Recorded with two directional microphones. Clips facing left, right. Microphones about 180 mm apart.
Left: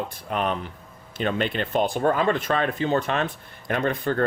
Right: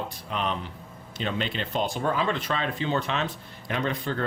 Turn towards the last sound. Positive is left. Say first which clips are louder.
# left 5 dB
turn(degrees=50)  # may be behind; listen again after turning